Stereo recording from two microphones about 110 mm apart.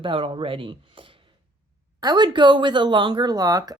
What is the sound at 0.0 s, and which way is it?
Speech, 50° right (ahead or behind).